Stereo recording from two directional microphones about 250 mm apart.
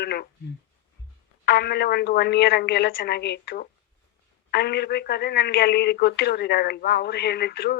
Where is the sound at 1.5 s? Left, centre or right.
Left.